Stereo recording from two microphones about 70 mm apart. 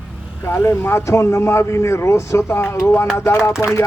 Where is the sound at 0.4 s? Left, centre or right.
Left.